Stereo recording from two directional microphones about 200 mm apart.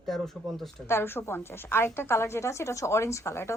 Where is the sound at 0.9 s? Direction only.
10° left (ahead or behind).